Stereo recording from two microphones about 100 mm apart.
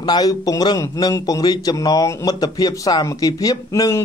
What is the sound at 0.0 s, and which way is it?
A man's voice, 45° left (ahead or behind).